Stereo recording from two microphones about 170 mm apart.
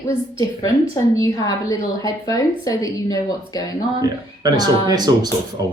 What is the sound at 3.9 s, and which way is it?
Speech, 25° right (ahead or behind).